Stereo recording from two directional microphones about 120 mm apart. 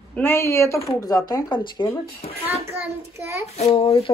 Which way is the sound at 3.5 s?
55° left (ahead or behind).